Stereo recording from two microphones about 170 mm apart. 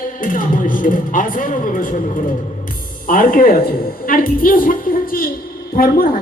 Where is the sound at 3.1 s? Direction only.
55° left (ahead or behind).